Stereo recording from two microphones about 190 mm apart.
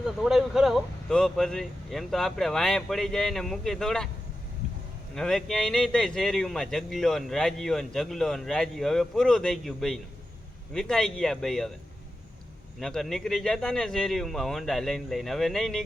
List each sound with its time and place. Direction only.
0.0 s speech: centre (ahead or behind)
5.1 s speech: centre (ahead or behind)
12.8 s speech: centre (ahead or behind)